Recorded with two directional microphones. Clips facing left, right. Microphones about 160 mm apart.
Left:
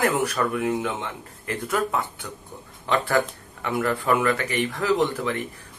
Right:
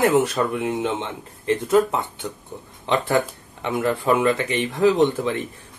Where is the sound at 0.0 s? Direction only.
20° right (ahead or behind).